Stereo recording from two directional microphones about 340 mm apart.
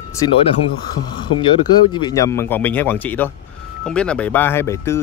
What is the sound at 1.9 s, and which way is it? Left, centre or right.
Speech, centre.